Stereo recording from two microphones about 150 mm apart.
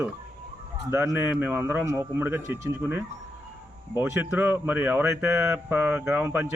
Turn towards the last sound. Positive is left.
turn(degrees=-15)  # may be behind; listen again after turning